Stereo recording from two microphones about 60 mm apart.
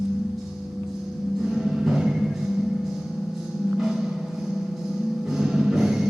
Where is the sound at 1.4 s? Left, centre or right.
Centre.